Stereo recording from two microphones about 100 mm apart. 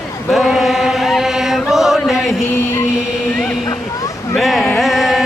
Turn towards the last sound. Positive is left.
turn(degrees=0)  # may be behind; listen again after turning